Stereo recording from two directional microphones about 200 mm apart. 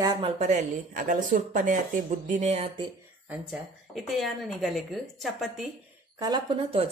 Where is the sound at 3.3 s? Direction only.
Centre (ahead or behind).